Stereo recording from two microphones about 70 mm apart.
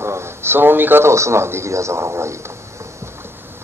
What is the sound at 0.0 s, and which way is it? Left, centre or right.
A man's voice, right.